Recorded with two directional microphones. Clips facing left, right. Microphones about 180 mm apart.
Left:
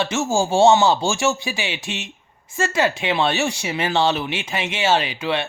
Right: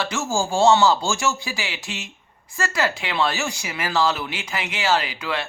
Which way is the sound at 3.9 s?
25° left (ahead or behind).